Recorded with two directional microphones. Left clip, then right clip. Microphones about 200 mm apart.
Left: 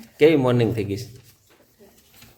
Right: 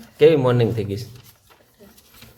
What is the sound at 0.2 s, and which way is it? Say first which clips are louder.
Speech: right 2 dB; centre (ahead or behind).